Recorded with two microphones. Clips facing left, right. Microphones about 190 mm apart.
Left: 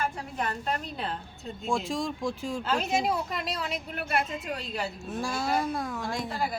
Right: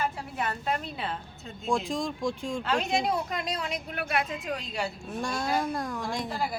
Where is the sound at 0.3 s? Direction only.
5° right (ahead or behind).